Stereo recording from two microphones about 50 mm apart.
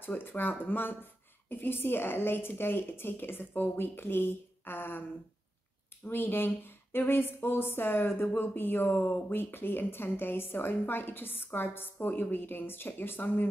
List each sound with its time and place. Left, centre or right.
0.0 s speech: left
6.0 s speech: left